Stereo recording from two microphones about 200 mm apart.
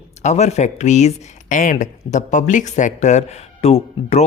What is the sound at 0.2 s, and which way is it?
A man's voice, 35° left (ahead or behind).